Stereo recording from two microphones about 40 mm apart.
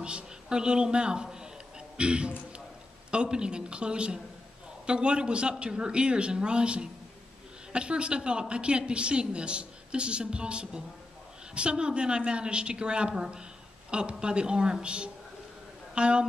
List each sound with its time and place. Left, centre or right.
0.0 s a man's voice: right